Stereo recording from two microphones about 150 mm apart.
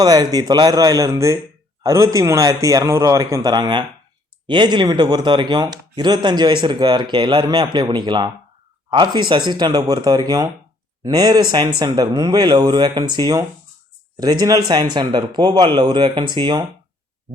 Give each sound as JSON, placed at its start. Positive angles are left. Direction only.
{"t": 0.0, "sound": "speech", "side_deg": -25}